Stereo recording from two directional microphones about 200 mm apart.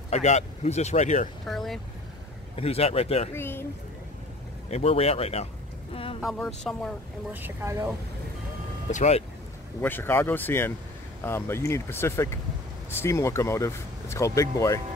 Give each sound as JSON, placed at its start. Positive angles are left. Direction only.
{"t": 0.1, "sound": "speech", "side_deg": 35}
{"t": 1.5, "sound": "speech", "side_deg": 0}
{"t": 2.5, "sound": "speech", "side_deg": 30}
{"t": 3.3, "sound": "speech", "side_deg": 10}
{"t": 4.6, "sound": "speech", "side_deg": 30}
{"t": 6.2, "sound": "speech", "side_deg": 5}
{"t": 7.3, "sound": "speech", "side_deg": -10}
{"t": 8.9, "sound": "speech", "side_deg": 35}
{"t": 9.8, "sound": "speech", "side_deg": 10}